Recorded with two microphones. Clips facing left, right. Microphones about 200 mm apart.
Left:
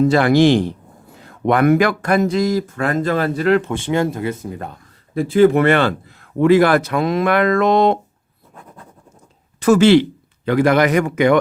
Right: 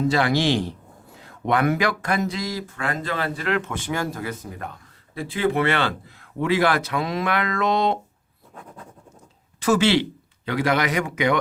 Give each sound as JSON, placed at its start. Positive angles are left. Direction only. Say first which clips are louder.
{"t": 0.1, "sound": "speech", "louder": "left 8 dB", "side_deg": 50}
{"t": 5.1, "sound": "speech", "louder": "left 10 dB", "side_deg": 45}
{"t": 9.6, "sound": "a man's voice", "louder": "left 8 dB", "side_deg": 50}